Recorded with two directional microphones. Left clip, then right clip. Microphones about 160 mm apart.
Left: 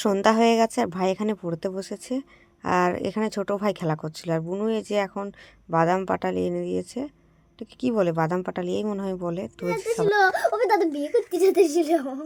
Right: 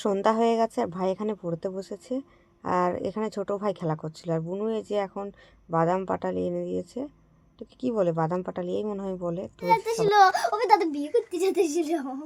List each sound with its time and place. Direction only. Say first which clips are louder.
0.0 s a woman's voice: left 3 dB; 20° left (ahead or behind)
10.1 s speech: right 1 dB; 40° right (ahead or behind)
11.3 s speech: left 5 dB; 10° right (ahead or behind)